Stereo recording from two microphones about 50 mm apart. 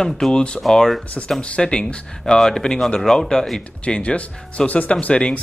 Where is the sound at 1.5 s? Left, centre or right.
Centre.